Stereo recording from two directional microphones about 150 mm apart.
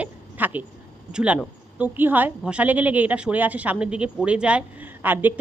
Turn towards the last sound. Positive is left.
turn(degrees=-10)  # may be behind; listen again after turning